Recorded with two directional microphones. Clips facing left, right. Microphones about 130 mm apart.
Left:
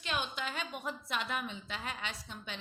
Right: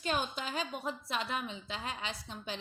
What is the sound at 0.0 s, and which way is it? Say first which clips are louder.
A woman's voice: right 3 dB; 40° right (ahead or behind).